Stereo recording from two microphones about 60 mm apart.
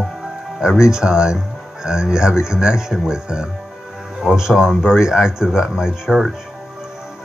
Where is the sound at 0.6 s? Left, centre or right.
Centre.